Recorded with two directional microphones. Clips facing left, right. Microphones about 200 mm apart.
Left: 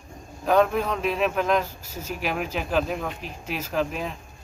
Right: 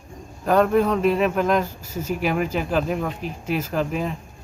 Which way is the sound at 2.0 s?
50° right (ahead or behind).